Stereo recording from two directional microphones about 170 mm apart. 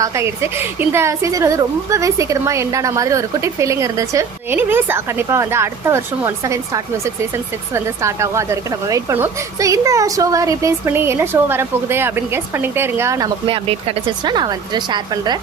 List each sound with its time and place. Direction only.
0.0 s a woman's voice: 15° right (ahead or behind)
13.7 s a woman's voice: 35° right (ahead or behind)